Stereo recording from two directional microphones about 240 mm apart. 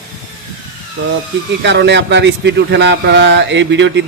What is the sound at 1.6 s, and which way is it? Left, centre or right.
A man's voice, right.